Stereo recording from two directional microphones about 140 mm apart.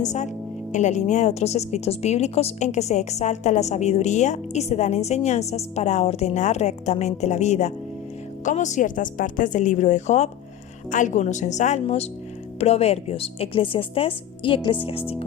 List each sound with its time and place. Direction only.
0.0 s a woman's voice: 55° left (ahead or behind)